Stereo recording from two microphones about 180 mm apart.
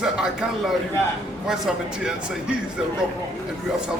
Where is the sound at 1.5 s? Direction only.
5° right (ahead or behind).